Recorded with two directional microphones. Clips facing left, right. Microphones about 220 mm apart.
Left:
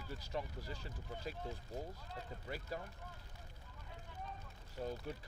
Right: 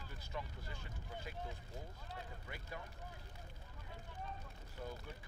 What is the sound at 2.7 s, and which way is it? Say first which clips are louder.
Speech: left 4 dB; 35° left (ahead or behind).